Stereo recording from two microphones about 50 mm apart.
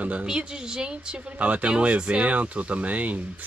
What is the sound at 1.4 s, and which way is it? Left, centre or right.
Speech, right.